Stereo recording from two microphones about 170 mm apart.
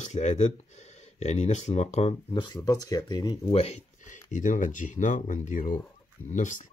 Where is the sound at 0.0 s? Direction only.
45° left (ahead or behind); by 3.3 s 25° left (ahead or behind).